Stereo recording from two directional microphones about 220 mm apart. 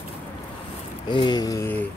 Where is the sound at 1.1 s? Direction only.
20° left (ahead or behind).